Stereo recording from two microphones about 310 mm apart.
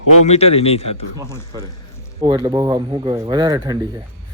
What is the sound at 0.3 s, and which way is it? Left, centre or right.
Speech, centre.